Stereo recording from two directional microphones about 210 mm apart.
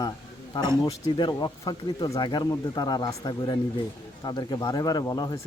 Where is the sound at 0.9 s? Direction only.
20° left (ahead or behind).